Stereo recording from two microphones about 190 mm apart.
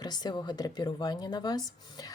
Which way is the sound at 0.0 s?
20° left (ahead or behind).